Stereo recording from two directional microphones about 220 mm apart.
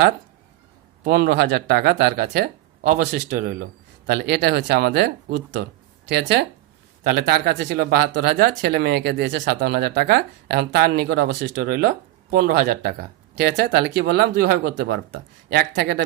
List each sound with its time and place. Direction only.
1.0 s speech: 50° right (ahead or behind)